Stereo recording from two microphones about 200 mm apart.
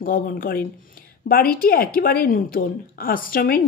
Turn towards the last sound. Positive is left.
turn(degrees=45)  # may be behind; listen again after turning